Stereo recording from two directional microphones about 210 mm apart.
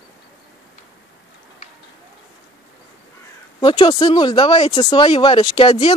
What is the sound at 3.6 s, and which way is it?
Speech, 25° left (ahead or behind).